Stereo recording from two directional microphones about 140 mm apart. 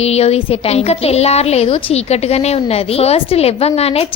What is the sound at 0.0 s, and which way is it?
A woman's voice, 45° left (ahead or behind).